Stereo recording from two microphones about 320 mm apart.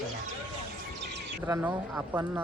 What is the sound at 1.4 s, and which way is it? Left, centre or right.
Speech, centre.